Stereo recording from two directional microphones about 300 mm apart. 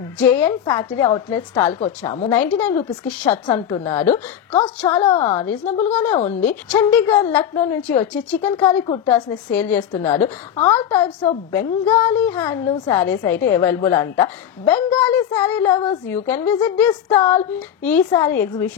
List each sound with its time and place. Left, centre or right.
0.2 s a woman's voice: centre
2.3 s a woman's voice: centre
6.4 s a woman's voice: centre
7.1 s a woman's voice: centre
8.0 s a woman's voice: centre
10.0 s a woman's voice: centre